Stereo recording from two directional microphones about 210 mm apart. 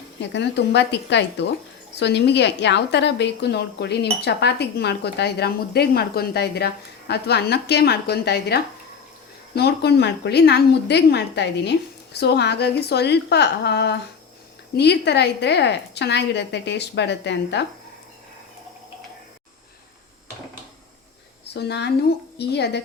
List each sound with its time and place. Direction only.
0.2 s a woman's voice: 55° left (ahead or behind)
21.4 s a woman's voice: 55° left (ahead or behind)